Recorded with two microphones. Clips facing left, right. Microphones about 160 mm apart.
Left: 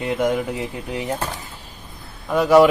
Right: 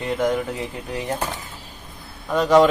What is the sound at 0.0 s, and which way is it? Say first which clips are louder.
Speech: left 1 dB; 10° left (ahead or behind).